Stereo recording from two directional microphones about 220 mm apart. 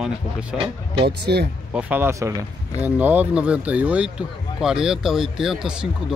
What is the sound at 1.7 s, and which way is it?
Speech, 10° right (ahead or behind).